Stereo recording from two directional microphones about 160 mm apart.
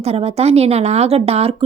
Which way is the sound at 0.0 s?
40° right (ahead or behind).